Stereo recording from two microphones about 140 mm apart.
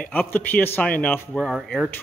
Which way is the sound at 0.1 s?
10° left (ahead or behind).